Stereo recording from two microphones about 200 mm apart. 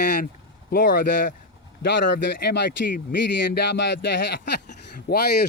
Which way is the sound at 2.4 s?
55° left (ahead or behind).